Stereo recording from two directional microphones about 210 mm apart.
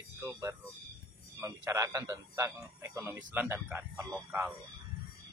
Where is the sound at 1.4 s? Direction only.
15° right (ahead or behind).